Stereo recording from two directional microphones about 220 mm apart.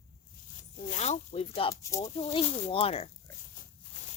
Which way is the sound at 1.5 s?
20° left (ahead or behind).